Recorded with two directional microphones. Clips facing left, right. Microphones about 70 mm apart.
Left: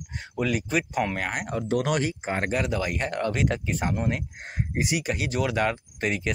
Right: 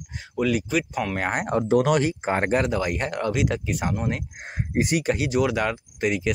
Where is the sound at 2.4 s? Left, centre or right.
Right.